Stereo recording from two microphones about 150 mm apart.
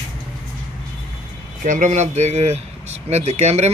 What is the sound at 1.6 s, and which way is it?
Speech, 55° right (ahead or behind).